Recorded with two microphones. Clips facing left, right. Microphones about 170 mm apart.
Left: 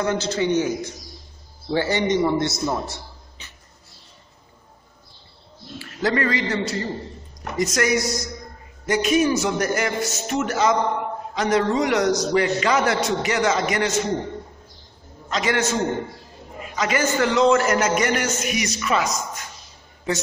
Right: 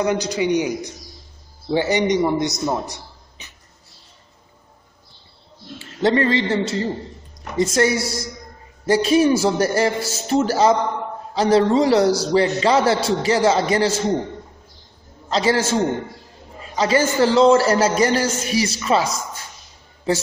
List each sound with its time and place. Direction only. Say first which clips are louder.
0.0 s a man's voice: right 2 dB; 15° right (ahead or behind)
5.8 s a man's voice: right 5 dB; 25° right (ahead or behind)
15.2 s a man's voice: right 4 dB; 30° right (ahead or behind)